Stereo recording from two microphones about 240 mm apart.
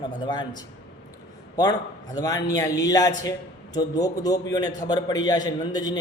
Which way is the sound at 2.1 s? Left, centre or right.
Centre.